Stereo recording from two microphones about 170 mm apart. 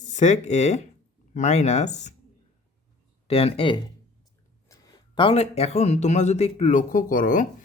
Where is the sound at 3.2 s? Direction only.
35° left (ahead or behind).